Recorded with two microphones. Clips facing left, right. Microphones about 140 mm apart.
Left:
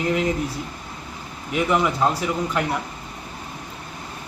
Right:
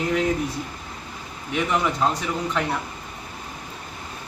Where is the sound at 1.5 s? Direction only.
5° left (ahead or behind).